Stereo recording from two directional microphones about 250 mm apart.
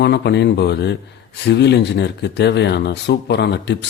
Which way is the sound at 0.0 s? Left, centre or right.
Left.